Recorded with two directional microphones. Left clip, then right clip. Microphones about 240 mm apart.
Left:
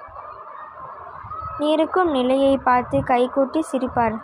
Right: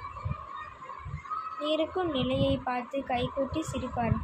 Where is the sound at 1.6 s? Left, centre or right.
Left.